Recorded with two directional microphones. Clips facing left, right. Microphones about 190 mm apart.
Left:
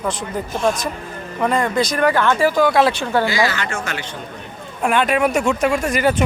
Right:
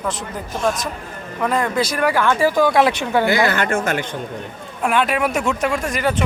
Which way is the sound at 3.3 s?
55° right (ahead or behind).